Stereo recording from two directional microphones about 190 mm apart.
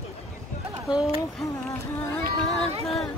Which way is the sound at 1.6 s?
Centre (ahead or behind).